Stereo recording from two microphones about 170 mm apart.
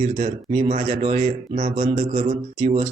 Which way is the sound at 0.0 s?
40° right (ahead or behind).